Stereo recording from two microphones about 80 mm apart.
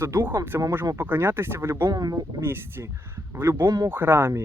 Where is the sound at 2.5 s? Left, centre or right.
Right.